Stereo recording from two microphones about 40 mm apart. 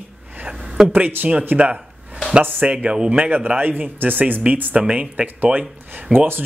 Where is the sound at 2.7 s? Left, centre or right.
Right.